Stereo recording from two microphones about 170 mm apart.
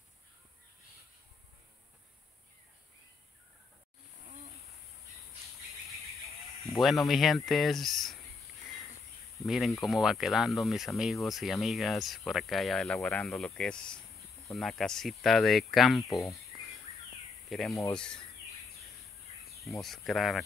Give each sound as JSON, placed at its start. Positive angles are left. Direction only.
{"t": 6.6, "sound": "speech", "side_deg": 0}
{"t": 9.5, "sound": "speech", "side_deg": 0}
{"t": 19.6, "sound": "speech", "side_deg": 0}